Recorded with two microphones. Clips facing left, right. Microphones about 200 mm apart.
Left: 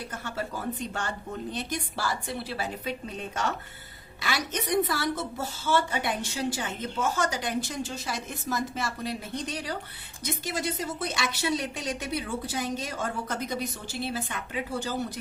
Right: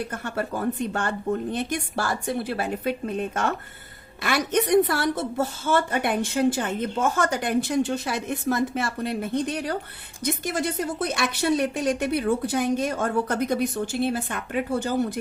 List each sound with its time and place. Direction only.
0.1 s a woman's voice: 55° right (ahead or behind)